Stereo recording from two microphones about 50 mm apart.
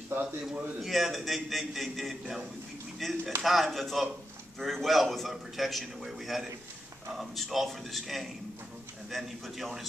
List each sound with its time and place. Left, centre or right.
0.1 s a man's voice: right
0.7 s a man's voice: centre